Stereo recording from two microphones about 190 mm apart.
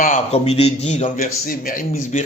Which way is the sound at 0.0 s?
35° left (ahead or behind).